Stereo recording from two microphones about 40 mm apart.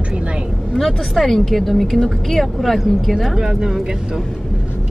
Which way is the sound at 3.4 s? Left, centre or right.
Centre.